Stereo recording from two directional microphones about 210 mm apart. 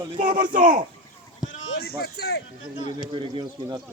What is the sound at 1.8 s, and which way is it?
Speech, 50° left (ahead or behind).